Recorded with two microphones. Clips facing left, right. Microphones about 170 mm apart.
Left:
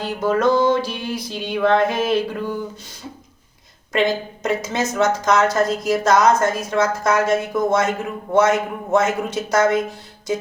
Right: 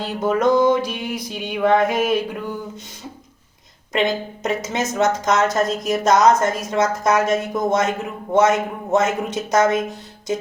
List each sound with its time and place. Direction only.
0.0 s music: 20° right (ahead or behind)
3.9 s speech: 20° right (ahead or behind)